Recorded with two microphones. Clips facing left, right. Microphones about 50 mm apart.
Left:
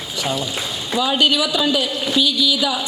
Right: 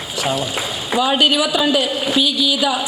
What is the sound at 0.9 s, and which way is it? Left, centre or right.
A woman's voice, right.